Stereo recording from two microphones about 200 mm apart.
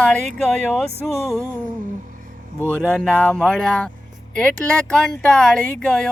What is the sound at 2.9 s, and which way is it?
Speech, 5° left (ahead or behind).